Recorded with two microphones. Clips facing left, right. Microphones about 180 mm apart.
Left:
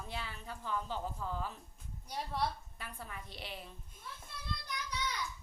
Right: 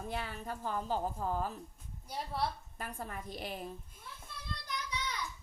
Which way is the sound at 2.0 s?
Centre (ahead or behind).